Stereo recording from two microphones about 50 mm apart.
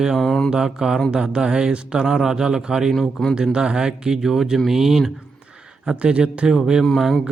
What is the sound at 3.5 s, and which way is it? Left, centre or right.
Speech, centre.